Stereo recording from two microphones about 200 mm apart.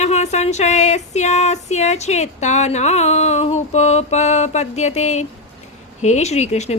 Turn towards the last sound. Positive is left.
turn(degrees=35)  # may be behind; listen again after turning